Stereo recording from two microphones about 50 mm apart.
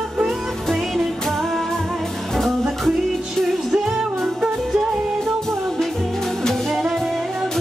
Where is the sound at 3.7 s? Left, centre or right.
Centre.